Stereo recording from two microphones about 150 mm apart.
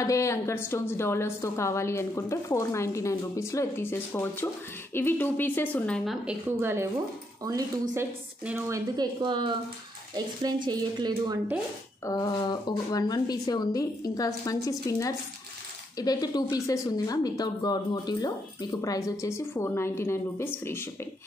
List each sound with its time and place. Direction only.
0.0 s a woman's voice: 20° left (ahead or behind)
6.2 s a woman's voice: 15° right (ahead or behind)
7.9 s a woman's voice: 15° right (ahead or behind)
9.2 s a woman's voice: 30° right (ahead or behind)
12.0 s speech: 25° left (ahead or behind)